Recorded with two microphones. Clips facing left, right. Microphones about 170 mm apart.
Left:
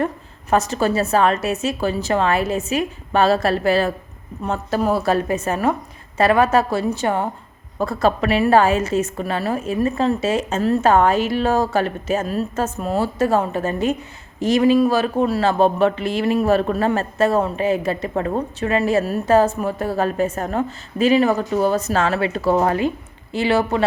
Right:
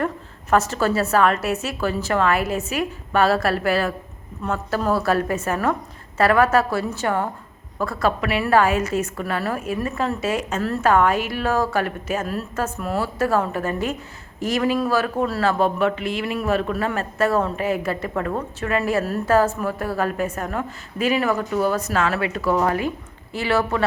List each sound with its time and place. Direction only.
0.5 s a woman's voice: 15° left (ahead or behind)